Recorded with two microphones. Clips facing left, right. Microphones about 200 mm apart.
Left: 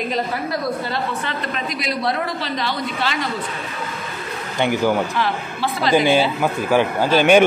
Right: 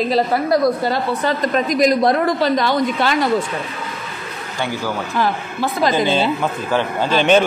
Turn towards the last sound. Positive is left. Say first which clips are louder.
# left 1 dB
turn(degrees=10)  # may be behind; listen again after turning